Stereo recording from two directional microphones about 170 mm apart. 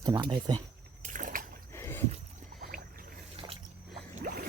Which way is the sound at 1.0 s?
50° right (ahead or behind).